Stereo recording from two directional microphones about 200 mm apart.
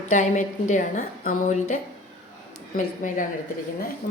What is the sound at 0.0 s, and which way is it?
A woman's voice, 40° left (ahead or behind).